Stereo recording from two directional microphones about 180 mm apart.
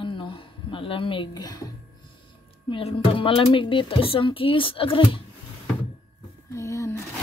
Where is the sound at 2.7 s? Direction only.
30° left (ahead or behind).